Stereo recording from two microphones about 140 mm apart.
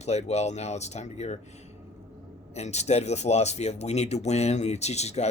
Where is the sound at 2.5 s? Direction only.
50° left (ahead or behind).